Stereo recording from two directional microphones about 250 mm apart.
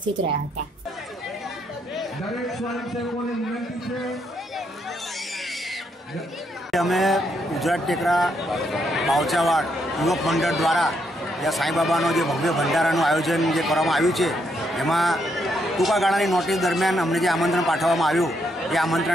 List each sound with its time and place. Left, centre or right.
6.7 s speech: centre